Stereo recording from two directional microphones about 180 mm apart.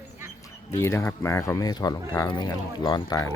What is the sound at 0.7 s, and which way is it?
Speech, 15° left (ahead or behind).